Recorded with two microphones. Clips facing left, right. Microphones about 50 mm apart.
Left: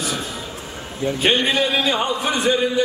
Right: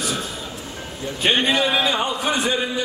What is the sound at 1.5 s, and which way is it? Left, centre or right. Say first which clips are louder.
Speech: even; centre.